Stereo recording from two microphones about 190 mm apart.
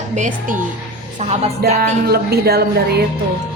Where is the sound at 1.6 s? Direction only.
55° right (ahead or behind).